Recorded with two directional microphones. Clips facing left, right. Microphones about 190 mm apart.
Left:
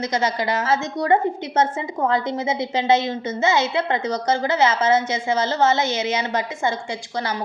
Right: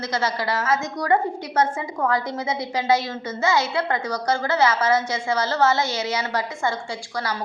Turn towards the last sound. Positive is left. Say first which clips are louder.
# left 2 dB
turn(degrees=20)  # may be behind; listen again after turning